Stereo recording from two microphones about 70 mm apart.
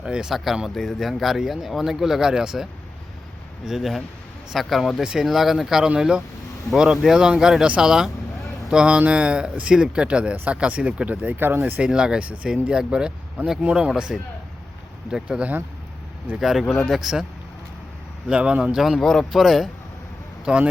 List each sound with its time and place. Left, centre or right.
0.0 s speech: centre
3.7 s speech: centre; by 11.7 s right
11.8 s speech: centre
15.1 s speech: centre
16.4 s speech: centre
18.3 s speech: centre
20.4 s speech: centre